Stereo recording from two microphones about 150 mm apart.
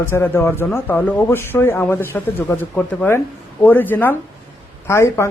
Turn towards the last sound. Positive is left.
turn(degrees=20)  # may be behind; listen again after turning